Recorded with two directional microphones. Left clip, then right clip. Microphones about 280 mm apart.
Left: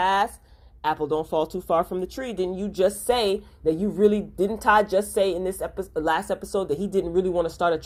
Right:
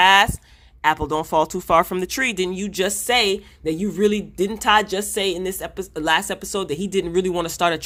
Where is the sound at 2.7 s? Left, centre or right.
Right.